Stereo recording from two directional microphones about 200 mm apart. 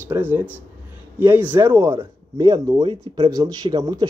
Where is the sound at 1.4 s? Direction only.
20° right (ahead or behind).